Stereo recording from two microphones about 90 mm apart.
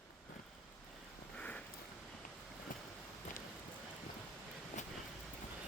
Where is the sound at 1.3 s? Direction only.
15° left (ahead or behind).